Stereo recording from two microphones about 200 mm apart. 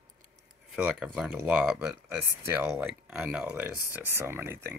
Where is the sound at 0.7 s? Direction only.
5° right (ahead or behind).